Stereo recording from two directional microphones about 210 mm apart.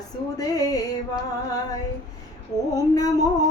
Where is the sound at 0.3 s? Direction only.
15° left (ahead or behind).